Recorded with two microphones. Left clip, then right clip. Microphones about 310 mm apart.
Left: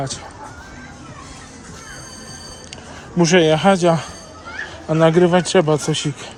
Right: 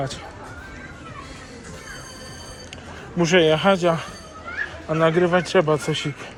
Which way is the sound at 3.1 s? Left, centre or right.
Left.